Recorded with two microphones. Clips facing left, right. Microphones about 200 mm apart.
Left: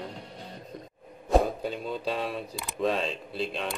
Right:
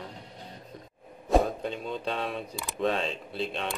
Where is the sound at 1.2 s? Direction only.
Centre (ahead or behind).